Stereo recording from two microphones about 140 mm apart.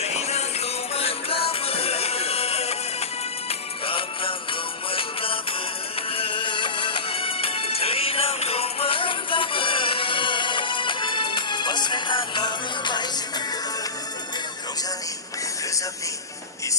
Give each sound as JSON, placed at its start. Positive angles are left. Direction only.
{"t": 0.0, "sound": "music", "side_deg": 50}